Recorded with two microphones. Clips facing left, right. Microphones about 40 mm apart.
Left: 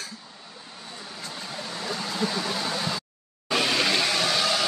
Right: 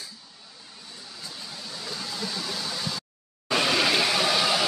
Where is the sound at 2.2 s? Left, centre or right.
Left.